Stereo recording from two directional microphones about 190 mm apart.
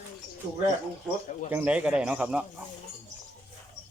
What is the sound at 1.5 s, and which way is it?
Speech, 5° right (ahead or behind).